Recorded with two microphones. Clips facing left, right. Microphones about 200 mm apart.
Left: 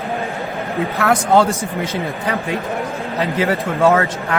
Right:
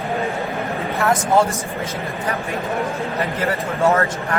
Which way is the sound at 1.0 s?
70° left (ahead or behind).